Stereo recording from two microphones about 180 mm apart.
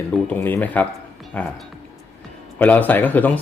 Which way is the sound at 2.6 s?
10° left (ahead or behind).